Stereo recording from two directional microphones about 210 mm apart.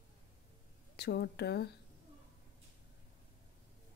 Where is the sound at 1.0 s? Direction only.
50° left (ahead or behind).